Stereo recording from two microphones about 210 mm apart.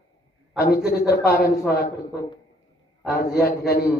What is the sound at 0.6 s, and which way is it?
Speech, 50° left (ahead or behind).